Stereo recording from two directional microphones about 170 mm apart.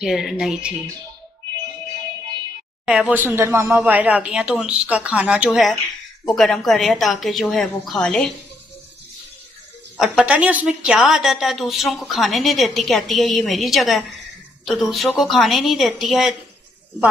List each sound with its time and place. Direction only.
0.0 s a woman's voice: centre (ahead or behind)
2.8 s a woman's voice: 5° right (ahead or behind)
9.9 s a woman's voice: 5° right (ahead or behind)